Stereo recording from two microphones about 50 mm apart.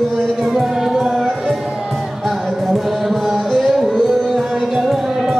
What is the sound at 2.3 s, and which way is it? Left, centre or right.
Music, centre.